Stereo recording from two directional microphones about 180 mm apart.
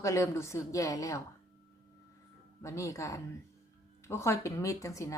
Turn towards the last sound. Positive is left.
turn(degrees=15)  # may be behind; listen again after turning